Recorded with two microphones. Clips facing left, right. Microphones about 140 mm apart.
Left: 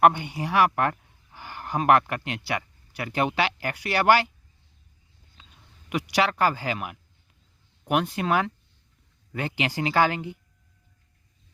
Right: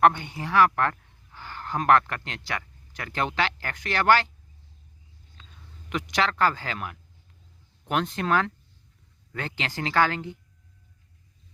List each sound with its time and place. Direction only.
0.0 s speech: 15° left (ahead or behind)
5.9 s speech: 10° left (ahead or behind)